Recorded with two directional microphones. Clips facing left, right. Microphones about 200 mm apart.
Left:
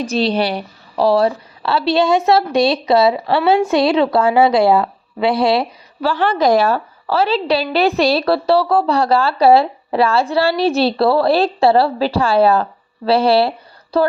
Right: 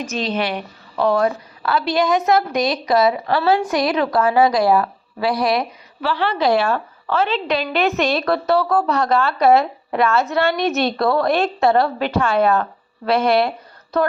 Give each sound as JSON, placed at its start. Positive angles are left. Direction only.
{"t": 0.0, "sound": "a woman's voice", "side_deg": 35}
{"t": 6.1, "sound": "a woman's voice", "side_deg": 45}